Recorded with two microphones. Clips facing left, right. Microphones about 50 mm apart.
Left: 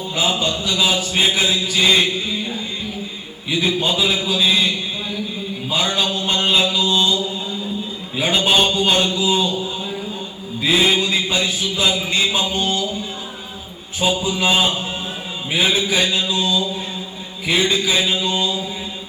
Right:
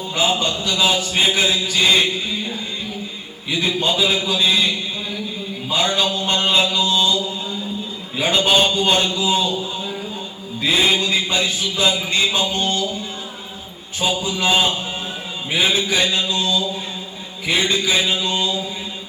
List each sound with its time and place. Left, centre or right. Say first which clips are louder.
0.2 s a man's voice: right 1 dB; centre
3.5 s a man's voice: left 1 dB; centre
5.7 s a man's voice: right 1 dB; centre
8.2 s a man's voice: even; centre
10.6 s a man's voice: left 1 dB; centre
14.0 s a man's voice: left 2 dB; centre
15.5 s a man's voice: even; centre
16.4 s a man's voice: left 2 dB; centre
17.4 s a man's voice: left 1 dB; centre